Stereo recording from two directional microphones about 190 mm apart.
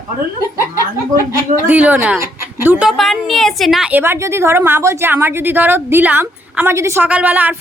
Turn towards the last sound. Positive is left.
turn(degrees=-10)  # may be behind; listen again after turning